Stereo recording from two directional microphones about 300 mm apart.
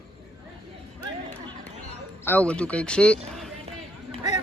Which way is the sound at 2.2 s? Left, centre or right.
Centre.